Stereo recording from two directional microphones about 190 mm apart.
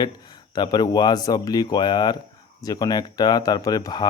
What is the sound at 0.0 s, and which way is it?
Speech, 20° left (ahead or behind).